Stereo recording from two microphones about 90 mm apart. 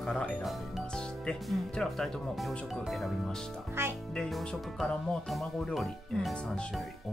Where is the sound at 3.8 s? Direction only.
30° right (ahead or behind).